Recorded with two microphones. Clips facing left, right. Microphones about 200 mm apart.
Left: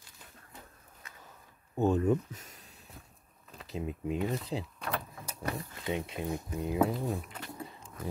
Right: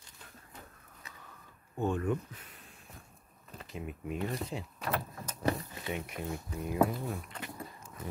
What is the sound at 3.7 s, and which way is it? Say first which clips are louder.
Speech: left 5 dB; 25° left (ahead or behind).